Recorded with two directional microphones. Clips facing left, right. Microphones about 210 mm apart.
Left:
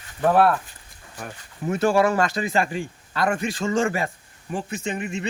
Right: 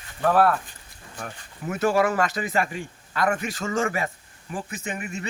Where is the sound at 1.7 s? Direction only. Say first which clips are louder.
Left 2 dB; 30° left (ahead or behind).